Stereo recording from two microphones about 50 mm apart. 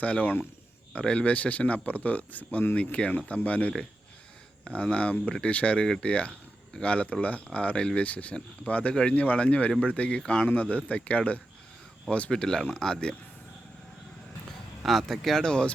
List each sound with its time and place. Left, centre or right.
0.0 s speech: left
12.3 s speech: centre
14.8 s speech: centre
15.4 s speech: centre